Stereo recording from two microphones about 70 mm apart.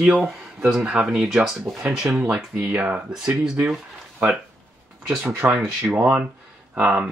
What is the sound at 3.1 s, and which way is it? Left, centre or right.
Speech, centre.